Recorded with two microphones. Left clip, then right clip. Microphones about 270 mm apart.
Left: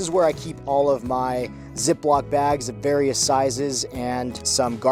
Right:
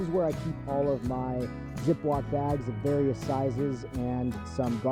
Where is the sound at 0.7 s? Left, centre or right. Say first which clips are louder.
Left 10 dB; left.